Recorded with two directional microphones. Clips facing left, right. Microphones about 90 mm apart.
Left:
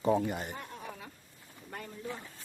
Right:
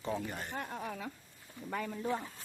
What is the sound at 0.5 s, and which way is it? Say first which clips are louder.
Speech: right 4 dB; 90° right.